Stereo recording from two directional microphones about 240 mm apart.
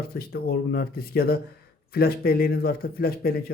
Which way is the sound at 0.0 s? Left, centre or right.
Left.